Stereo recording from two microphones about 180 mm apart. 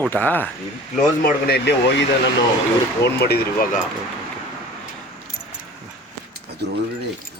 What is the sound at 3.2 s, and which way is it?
Speech, 60° left (ahead or behind).